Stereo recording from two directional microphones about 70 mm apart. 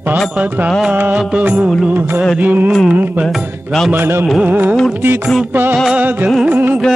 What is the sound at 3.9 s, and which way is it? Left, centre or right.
Music, right.